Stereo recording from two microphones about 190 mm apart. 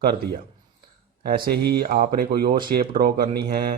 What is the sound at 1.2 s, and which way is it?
Speech, 55° right (ahead or behind).